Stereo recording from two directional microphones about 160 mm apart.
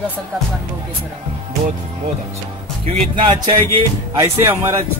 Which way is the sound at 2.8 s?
35° right (ahead or behind).